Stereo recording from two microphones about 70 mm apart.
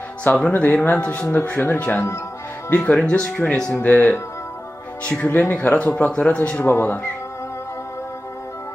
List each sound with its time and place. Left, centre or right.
0.5 s speech: left
6.7 s speech: left